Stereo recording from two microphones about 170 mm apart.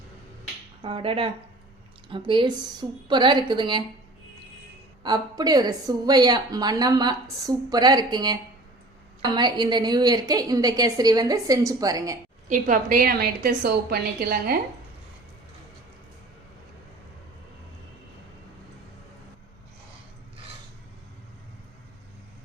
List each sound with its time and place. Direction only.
0.8 s a woman's voice: 30° right (ahead or behind)
5.0 s a woman's voice: 25° right (ahead or behind)
12.5 s a woman's voice: 50° right (ahead or behind)